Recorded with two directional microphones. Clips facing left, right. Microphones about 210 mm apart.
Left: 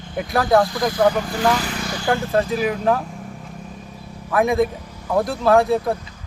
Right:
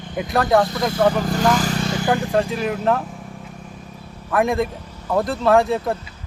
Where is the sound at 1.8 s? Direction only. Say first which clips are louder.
Right 1 dB; 20° right (ahead or behind).